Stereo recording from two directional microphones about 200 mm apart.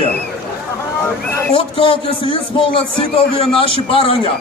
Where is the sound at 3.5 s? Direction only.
25° left (ahead or behind).